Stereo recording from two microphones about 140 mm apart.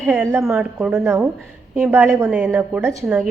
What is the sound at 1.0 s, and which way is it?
A woman's voice, 20° right (ahead or behind).